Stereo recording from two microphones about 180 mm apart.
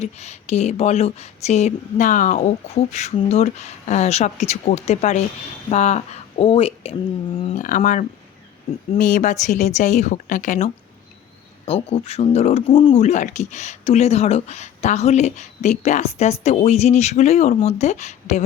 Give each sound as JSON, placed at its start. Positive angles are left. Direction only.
{"t": 0.0, "sound": "speech", "side_deg": 35}
{"t": 7.4, "sound": "speech", "side_deg": 45}
{"t": 11.6, "sound": "speech", "side_deg": 30}